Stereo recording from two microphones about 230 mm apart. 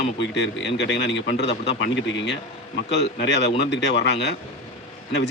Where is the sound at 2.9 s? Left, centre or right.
Left.